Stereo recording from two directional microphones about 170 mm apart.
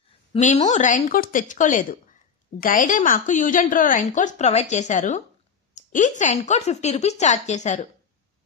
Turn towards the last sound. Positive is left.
turn(degrees=45)  # may be behind; listen again after turning